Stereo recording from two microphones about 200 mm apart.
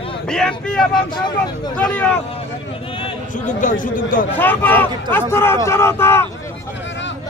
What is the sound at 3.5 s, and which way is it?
Speech, 40° left (ahead or behind).